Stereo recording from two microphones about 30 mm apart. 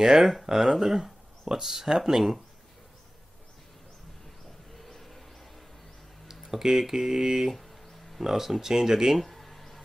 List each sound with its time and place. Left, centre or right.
0.0 s speech: centre
4.7 s train: centre
6.6 s speech: centre
9.2 s a sound: centre